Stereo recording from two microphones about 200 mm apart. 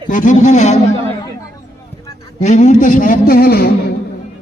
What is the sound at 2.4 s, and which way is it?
A man's voice, 35° left (ahead or behind).